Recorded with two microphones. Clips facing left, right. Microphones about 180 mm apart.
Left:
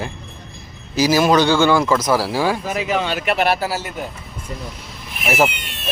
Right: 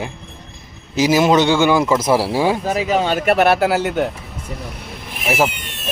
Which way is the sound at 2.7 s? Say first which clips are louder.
Right 3 dB; 40° right (ahead or behind).